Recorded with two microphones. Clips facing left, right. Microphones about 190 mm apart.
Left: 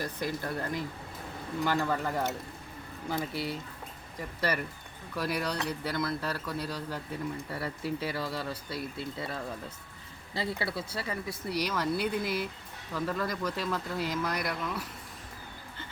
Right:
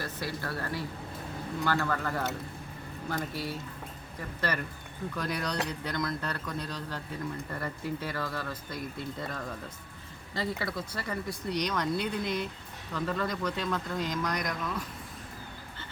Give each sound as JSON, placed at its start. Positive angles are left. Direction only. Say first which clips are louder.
{"t": 0.4, "sound": "speech", "louder": "left 1 dB", "side_deg": 20}